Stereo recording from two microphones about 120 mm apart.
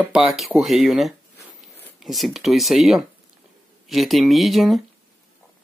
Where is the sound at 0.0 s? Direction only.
10° right (ahead or behind).